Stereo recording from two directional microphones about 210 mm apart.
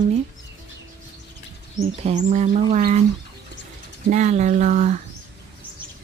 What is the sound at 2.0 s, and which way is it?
Speech, 35° right (ahead or behind).